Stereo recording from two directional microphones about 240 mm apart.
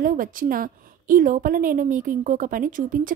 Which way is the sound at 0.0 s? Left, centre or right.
Right.